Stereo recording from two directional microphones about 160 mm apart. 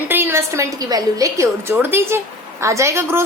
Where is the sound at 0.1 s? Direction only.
15° right (ahead or behind).